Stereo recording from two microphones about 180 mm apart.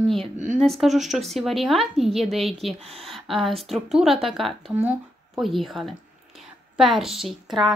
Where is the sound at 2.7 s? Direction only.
35° right (ahead or behind).